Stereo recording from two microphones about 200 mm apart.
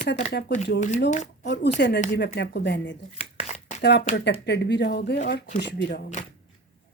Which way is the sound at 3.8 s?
60° left (ahead or behind).